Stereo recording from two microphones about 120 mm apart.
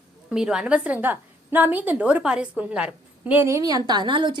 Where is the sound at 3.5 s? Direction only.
30° right (ahead or behind).